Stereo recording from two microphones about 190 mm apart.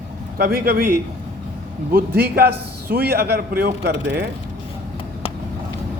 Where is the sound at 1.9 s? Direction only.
55° right (ahead or behind).